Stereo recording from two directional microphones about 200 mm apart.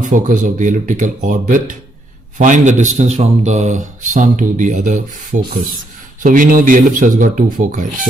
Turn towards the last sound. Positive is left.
turn(degrees=-40)  # may be behind; listen again after turning